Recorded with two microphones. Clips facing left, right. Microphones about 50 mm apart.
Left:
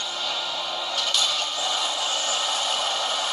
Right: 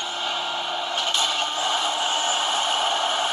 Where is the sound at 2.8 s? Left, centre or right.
Right.